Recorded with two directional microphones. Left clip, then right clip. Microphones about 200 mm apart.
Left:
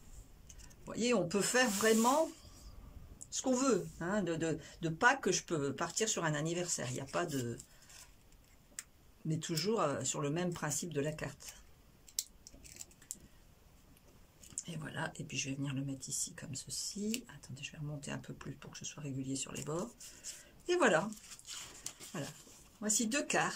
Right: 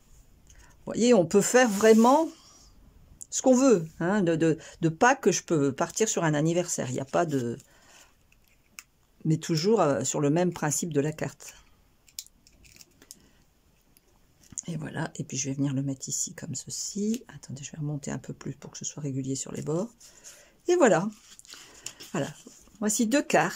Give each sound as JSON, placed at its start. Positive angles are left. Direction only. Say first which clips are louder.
{"t": 0.8, "sound": "speech", "louder": "right 12 dB", "side_deg": -35}
{"t": 3.2, "sound": "speech", "louder": "right 13 dB", "side_deg": -35}
{"t": 9.3, "sound": "speech", "louder": "right 11 dB", "side_deg": -40}
{"t": 14.5, "sound": "speech", "louder": "right 8 dB", "side_deg": -30}
{"t": 22.2, "sound": "speech", "louder": "right 15 dB", "side_deg": -35}